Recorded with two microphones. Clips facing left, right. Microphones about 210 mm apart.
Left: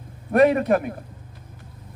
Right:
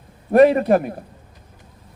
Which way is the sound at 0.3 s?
35° right (ahead or behind).